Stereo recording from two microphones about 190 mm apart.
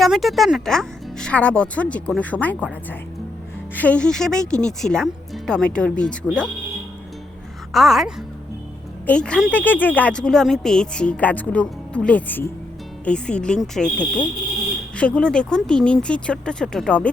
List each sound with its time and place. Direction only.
0.0 s speech: centre (ahead or behind)
3.8 s speech: 5° left (ahead or behind)
7.7 s speech: centre (ahead or behind)